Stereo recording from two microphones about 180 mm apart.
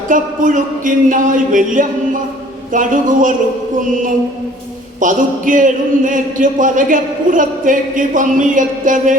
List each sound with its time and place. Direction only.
0.1 s a man's voice: 45° right (ahead or behind)
4.9 s a man's voice: 45° right (ahead or behind)